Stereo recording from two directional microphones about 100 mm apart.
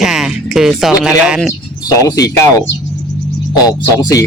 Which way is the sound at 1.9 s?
35° left (ahead or behind).